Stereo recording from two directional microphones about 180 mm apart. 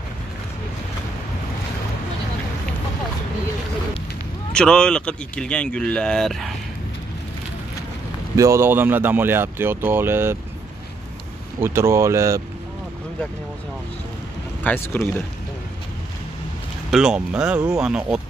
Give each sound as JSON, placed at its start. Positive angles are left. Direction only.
{"t": 4.5, "sound": "speech", "side_deg": 5}
{"t": 8.4, "sound": "speech", "side_deg": -15}
{"t": 11.6, "sound": "speech", "side_deg": -15}
{"t": 14.6, "sound": "speech", "side_deg": 10}
{"t": 16.9, "sound": "speech", "side_deg": -5}